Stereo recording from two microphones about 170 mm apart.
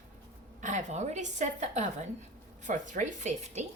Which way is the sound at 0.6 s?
45° right (ahead or behind).